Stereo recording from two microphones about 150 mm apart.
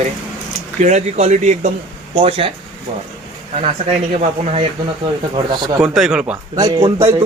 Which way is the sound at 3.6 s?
45° right (ahead or behind).